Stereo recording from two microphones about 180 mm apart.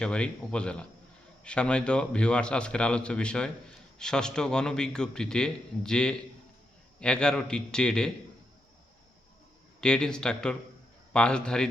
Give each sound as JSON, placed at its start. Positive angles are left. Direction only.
{"t": 0.0, "sound": "a man's voice", "side_deg": 5}
{"t": 9.8, "sound": "a man's voice", "side_deg": 5}